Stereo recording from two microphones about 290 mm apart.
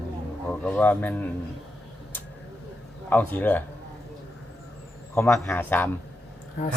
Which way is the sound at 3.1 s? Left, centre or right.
Centre.